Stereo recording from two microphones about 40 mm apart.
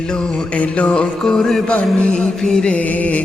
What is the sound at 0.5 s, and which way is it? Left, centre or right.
Mantra, left.